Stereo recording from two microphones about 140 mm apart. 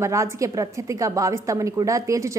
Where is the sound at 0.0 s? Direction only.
20° right (ahead or behind).